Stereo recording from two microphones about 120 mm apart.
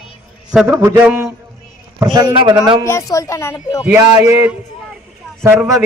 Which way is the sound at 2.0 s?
40° right (ahead or behind).